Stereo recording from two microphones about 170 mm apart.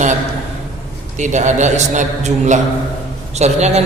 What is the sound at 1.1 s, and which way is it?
A man's voice, 45° right (ahead or behind).